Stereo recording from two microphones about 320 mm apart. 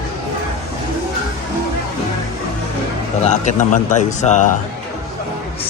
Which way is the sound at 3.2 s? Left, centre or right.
Left.